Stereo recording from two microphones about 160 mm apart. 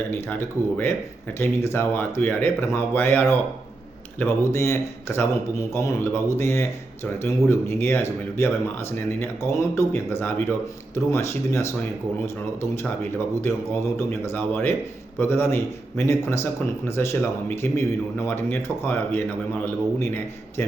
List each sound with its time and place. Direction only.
0.1 s speech: 15° left (ahead or behind)